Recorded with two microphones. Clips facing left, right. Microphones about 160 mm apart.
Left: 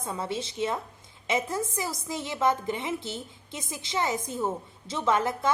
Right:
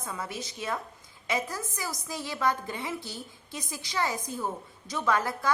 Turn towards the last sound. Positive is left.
turn(degrees=20)  # may be behind; listen again after turning